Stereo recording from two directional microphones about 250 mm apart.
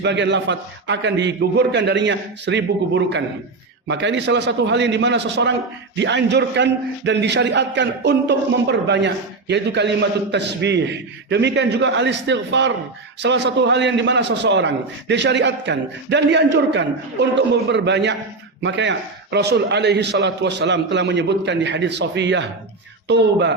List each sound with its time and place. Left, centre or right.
0.0 s a man's voice: right